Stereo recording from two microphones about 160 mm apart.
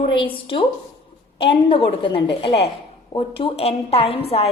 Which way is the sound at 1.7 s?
35° left (ahead or behind).